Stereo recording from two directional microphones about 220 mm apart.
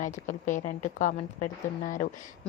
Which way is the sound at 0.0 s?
35° left (ahead or behind).